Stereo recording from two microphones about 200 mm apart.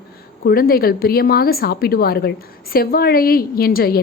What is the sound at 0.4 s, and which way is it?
A woman's voice, 45° left (ahead or behind).